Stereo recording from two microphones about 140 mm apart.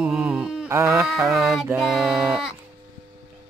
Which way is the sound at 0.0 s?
10° right (ahead or behind).